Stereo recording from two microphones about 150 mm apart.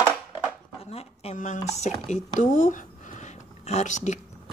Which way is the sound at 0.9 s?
45° left (ahead or behind).